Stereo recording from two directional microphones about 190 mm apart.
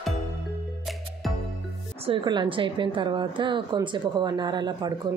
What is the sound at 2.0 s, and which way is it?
A woman's voice, 25° right (ahead or behind).